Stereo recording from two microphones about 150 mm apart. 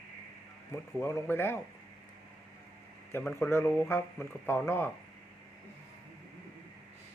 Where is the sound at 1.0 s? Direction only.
15° left (ahead or behind).